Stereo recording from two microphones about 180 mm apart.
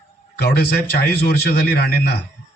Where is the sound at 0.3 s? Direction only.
65° left (ahead or behind).